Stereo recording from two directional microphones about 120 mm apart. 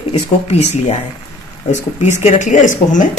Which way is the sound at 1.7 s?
85° left.